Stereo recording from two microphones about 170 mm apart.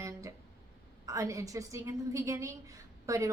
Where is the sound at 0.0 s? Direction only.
20° right (ahead or behind).